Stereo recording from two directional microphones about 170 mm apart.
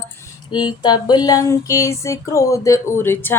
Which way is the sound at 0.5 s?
25° left (ahead or behind).